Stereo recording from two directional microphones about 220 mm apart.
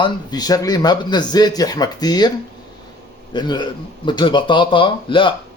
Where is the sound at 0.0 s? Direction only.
20° left (ahead or behind).